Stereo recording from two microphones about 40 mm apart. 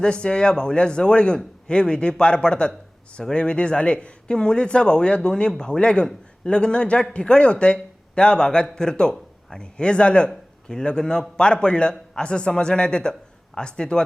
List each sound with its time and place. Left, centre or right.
0.0 s a man's voice: left